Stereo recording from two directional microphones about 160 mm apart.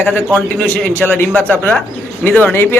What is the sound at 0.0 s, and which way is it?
A man's voice, 10° left (ahead or behind).